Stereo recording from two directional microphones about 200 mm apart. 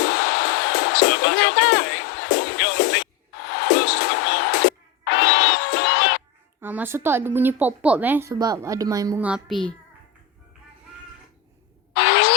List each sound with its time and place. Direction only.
0.0 s music: 55° left (ahead or behind)
6.6 s a woman's voice: 10° right (ahead or behind)
9.2 s a child's voice: centre (ahead or behind)
11.9 s a sound: 60° left (ahead or behind)